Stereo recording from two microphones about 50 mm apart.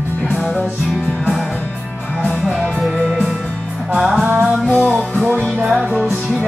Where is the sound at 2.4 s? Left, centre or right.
Centre.